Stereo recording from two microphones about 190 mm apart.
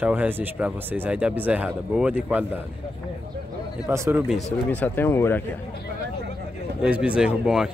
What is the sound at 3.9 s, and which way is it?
Speech, 15° right (ahead or behind).